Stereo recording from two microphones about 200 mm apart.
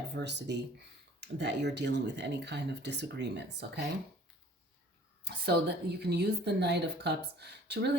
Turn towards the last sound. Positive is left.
turn(degrees=-55)  # may be behind; listen again after turning